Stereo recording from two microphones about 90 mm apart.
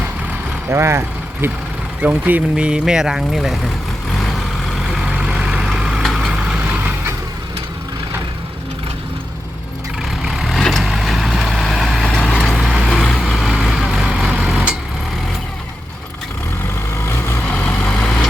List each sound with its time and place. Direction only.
0.7 s speech: 30° right (ahead or behind)
2.0 s speech: 15° right (ahead or behind)
5.1 s vehicle: 10° right (ahead or behind)
6.7 s vehicle: 25° right (ahead or behind)
10.0 s vehicle: 5° right (ahead or behind)
12.5 s vehicle: 5° right (ahead or behind)
17.0 s vehicle: 30° left (ahead or behind)
17.5 s vehicle: 15° left (ahead or behind)